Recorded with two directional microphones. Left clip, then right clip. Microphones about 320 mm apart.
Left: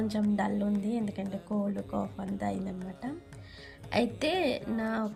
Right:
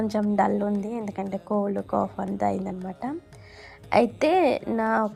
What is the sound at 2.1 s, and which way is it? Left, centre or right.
Speech, right.